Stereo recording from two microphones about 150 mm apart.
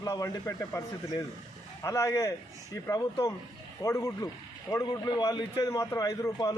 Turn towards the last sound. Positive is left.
turn(degrees=20)  # may be behind; listen again after turning